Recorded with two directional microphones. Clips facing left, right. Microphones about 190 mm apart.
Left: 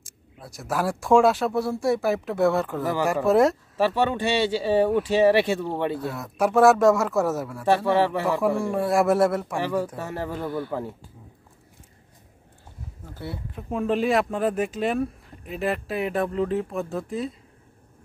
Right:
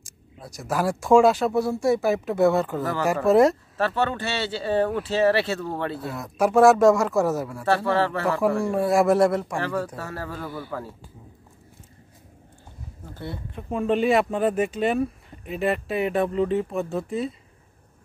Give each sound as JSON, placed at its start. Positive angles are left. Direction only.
{"t": 0.0, "sound": "speech", "side_deg": 0}
{"t": 3.8, "sound": "speech", "side_deg": 10}
{"t": 5.9, "sound": "speech", "side_deg": 0}
{"t": 7.6, "sound": "speech", "side_deg": 15}
{"t": 8.4, "sound": "speech", "side_deg": 0}
{"t": 9.6, "sound": "speech", "side_deg": 15}
{"t": 13.1, "sound": "speech", "side_deg": 5}